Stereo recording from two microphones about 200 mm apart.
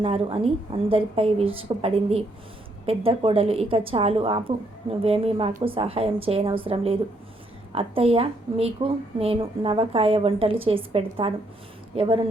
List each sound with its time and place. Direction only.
0.0 s a woman's voice: 30° right (ahead or behind)